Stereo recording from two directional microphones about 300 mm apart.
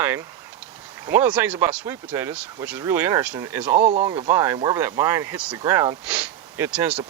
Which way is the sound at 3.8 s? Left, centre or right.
Right.